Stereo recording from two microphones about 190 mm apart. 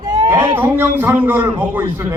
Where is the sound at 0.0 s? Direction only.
20° right (ahead or behind).